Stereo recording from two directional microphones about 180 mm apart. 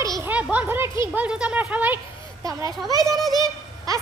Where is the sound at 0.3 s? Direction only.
10° right (ahead or behind).